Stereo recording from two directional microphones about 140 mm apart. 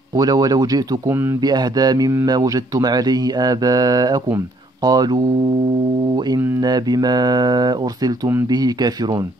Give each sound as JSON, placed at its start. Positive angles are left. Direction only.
{"t": 0.1, "sound": "a man's voice", "side_deg": -25}
{"t": 6.6, "sound": "a man's voice", "side_deg": -30}